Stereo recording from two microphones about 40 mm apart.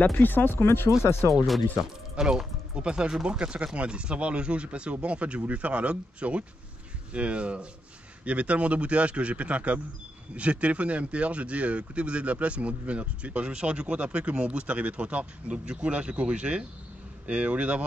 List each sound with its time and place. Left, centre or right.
0.0 s speech: left
2.2 s speech: centre
2.7 s speech: right